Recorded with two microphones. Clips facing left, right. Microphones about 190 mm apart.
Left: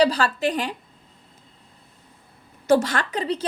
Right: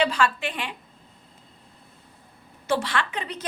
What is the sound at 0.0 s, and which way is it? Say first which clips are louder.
Speech: left 4 dB; 35° left (ahead or behind).